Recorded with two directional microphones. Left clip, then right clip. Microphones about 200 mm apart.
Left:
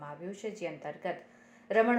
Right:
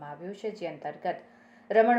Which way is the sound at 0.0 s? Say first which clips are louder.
Right 3 dB; 25° left (ahead or behind).